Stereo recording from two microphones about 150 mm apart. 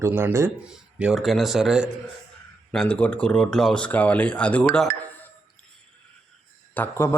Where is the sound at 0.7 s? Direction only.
5° right (ahead or behind).